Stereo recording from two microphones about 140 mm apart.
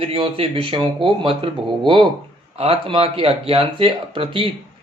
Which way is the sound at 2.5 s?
45° right (ahead or behind).